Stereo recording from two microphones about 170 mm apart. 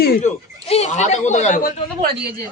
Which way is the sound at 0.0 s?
60° left (ahead or behind).